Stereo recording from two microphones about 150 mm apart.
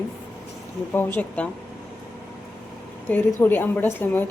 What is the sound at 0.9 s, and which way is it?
Speech, 15° left (ahead or behind).